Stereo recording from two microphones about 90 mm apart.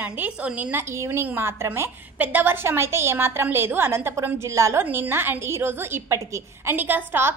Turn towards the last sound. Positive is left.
turn(degrees=-25)  # may be behind; listen again after turning